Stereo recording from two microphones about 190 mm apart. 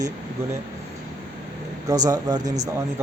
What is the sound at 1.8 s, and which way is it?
Speech, 20° right (ahead or behind).